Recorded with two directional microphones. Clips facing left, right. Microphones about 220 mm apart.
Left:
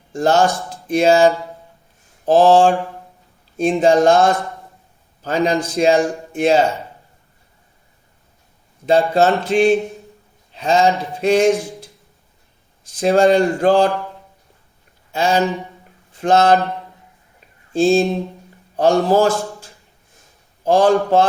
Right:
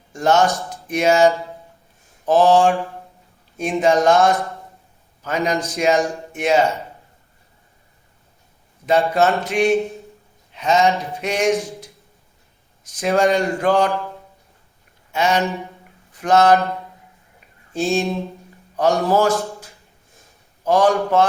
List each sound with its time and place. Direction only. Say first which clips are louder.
0.1 s speech: left 1 dB; 30° left (ahead or behind)
8.9 s a man's voice: left 2 dB; 30° left (ahead or behind)
12.8 s speech: left 4 dB; 30° left (ahead or behind)
15.1 s speech: left 2 dB; 30° left (ahead or behind)
17.7 s speech: left 6 dB; 30° left (ahead or behind)
19.4 s a sound: even; 30° left (ahead or behind)
20.7 s speech: left 3 dB; 30° left (ahead or behind)